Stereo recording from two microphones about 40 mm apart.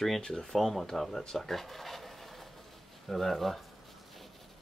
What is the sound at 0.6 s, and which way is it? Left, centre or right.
Speech, centre.